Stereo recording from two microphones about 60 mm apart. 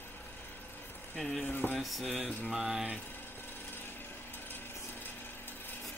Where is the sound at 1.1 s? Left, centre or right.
Centre.